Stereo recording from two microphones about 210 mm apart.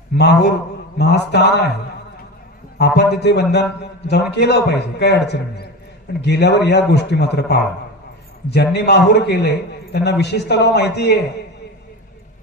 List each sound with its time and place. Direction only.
0.2 s a man's voice: 55° left (ahead or behind)
2.8 s a man's voice: 55° left (ahead or behind)
8.7 s a man's voice: 50° left (ahead or behind)